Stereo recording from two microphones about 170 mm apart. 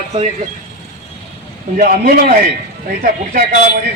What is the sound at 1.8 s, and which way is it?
Speech, 60° right (ahead or behind).